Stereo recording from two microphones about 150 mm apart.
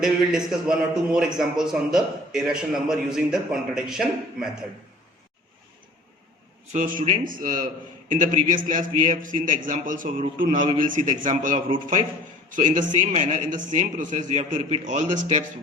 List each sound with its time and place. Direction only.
0.0 s a man's voice: 5° right (ahead or behind)
6.7 s a man's voice: 60° right (ahead or behind)